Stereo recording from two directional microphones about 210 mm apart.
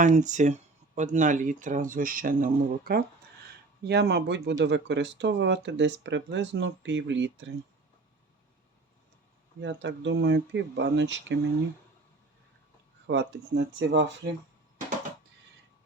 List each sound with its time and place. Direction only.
0.0 s speech: 35° right (ahead or behind); by 7.5 s 60° right (ahead or behind)
9.6 s speech: 60° right (ahead or behind)
13.1 s speech: 55° right (ahead or behind)